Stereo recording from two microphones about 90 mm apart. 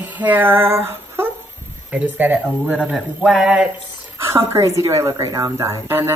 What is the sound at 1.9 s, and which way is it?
Speech, 20° right (ahead or behind).